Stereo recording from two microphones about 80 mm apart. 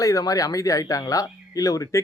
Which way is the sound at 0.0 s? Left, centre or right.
Left.